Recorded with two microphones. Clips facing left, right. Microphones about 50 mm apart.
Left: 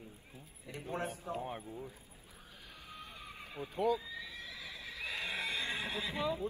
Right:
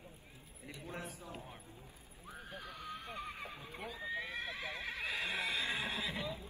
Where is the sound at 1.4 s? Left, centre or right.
Left.